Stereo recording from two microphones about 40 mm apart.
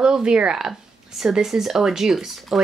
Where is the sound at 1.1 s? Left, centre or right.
Centre.